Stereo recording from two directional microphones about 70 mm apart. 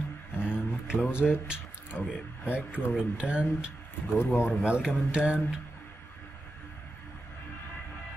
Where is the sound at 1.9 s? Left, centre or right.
Left.